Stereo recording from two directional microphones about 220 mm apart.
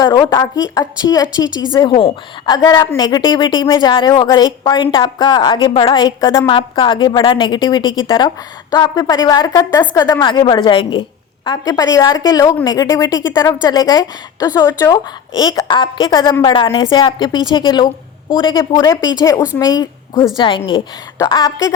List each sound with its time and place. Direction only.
0.0 s a woman's voice: 15° left (ahead or behind)